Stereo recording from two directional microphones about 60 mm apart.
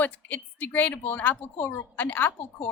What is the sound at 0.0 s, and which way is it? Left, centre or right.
Speech, left.